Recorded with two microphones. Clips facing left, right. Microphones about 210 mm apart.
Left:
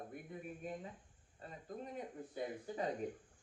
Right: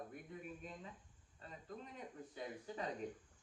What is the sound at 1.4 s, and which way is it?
A man's voice, 40° left (ahead or behind).